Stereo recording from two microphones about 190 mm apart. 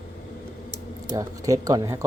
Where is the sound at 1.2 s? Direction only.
15° right (ahead or behind).